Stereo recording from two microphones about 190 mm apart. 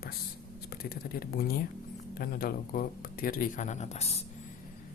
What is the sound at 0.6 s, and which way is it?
Speech, 55° left (ahead or behind).